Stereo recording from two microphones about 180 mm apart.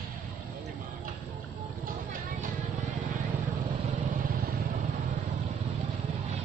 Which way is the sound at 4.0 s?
55° right (ahead or behind).